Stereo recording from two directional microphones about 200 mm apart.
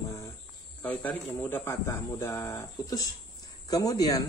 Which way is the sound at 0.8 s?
10° left (ahead or behind).